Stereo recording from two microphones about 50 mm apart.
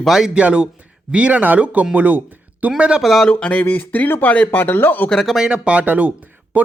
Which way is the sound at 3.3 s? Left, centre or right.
Left.